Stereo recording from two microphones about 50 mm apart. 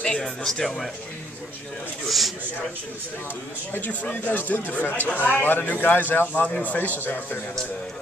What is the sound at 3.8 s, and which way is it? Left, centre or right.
Speech, left.